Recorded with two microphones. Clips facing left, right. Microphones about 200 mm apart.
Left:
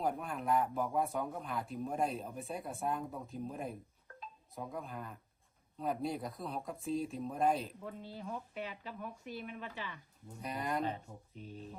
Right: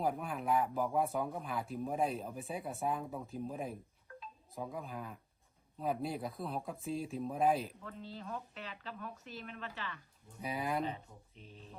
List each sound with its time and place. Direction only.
0.0 s speech: centre (ahead or behind)
7.9 s speech: 15° left (ahead or behind)
10.4 s speech: 5° right (ahead or behind)